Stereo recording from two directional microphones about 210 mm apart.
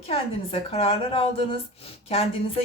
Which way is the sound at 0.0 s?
30° left (ahead or behind).